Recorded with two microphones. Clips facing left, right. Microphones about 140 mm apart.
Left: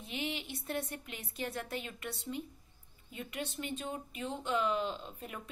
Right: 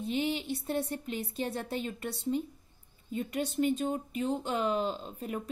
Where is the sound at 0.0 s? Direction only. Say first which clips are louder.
Right 8 dB; 35° right (ahead or behind).